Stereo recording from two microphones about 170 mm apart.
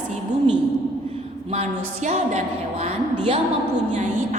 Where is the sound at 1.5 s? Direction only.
40° right (ahead or behind).